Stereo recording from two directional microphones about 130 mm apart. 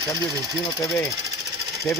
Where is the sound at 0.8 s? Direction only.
25° left (ahead or behind).